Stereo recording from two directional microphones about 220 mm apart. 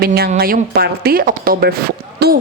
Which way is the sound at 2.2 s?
45° right (ahead or behind).